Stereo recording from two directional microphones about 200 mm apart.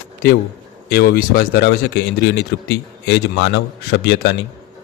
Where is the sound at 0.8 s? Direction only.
50° left (ahead or behind).